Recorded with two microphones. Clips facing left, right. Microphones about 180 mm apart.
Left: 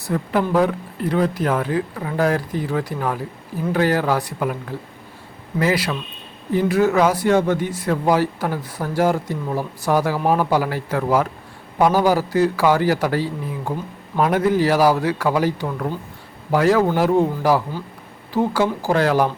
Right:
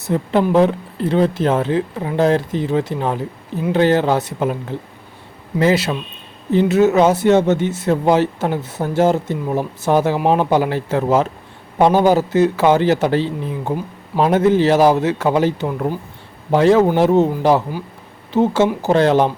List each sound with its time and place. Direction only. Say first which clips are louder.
0.0 s speech: right 4 dB; 25° right (ahead or behind)